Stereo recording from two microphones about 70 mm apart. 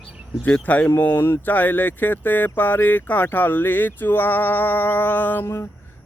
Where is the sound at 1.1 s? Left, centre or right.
Left.